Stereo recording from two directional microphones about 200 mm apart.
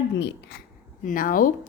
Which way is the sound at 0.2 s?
60° left (ahead or behind).